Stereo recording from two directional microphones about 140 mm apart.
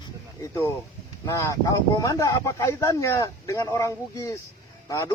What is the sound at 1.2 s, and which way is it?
A man's voice, 20° left (ahead or behind).